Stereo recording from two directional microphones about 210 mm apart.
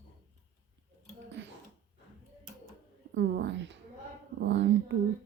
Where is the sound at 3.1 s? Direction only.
55° right (ahead or behind).